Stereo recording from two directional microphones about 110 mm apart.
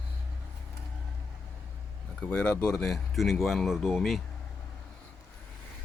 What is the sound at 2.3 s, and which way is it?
Speech, 10° left (ahead or behind).